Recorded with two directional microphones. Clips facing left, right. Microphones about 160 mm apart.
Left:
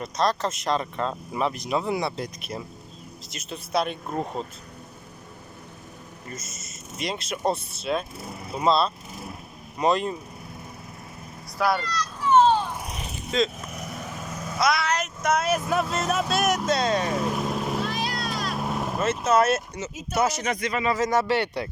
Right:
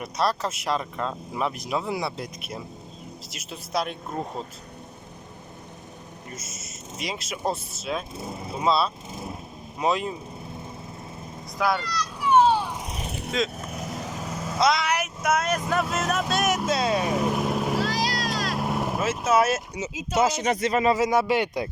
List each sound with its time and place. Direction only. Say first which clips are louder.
0.0 s speech: left 1 dB; 5° right (ahead or behind)
6.9 s speech: left 2 dB; centre (ahead or behind)
11.5 s speech: left 1 dB; 10° left (ahead or behind)
11.8 s a sound: even; 10° right (ahead or behind)
13.1 s vehicle: right 3 dB; 65° right (ahead or behind)
13.7 s vehicle: right 2 dB; 25° right (ahead or behind)
14.8 s speech: even; 10° right (ahead or behind)
17.8 s boat: right 2 dB; 90° right
18.5 s vehicle: right 1 dB; 5° right (ahead or behind)
19.9 s speech: right 3 dB; 90° right
20.1 s speech: right 2 dB; 30° right (ahead or behind)
20.9 s speech: right 1 dB; 10° right (ahead or behind)